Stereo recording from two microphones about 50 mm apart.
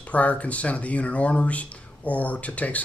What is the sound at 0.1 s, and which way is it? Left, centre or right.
Speech, left.